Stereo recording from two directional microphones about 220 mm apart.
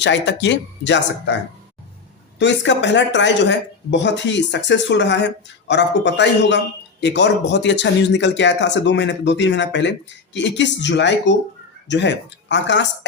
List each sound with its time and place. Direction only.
0.0 s speech: 55° left (ahead or behind)
2.4 s speech: 55° left (ahead or behind)